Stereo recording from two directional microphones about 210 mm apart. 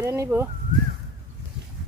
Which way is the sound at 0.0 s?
10° right (ahead or behind).